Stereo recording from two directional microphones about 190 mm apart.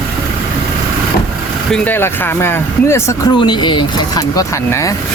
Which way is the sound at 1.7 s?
10° left (ahead or behind).